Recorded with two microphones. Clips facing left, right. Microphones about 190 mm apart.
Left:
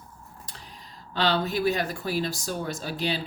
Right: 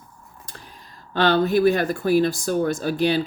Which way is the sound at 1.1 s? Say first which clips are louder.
Right 7 dB; 55° right (ahead or behind).